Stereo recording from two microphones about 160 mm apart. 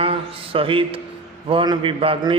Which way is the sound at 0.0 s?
35° right (ahead or behind).